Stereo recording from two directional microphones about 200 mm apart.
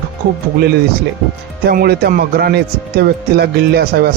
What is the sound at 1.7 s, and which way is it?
A man's voice, 50° right (ahead or behind).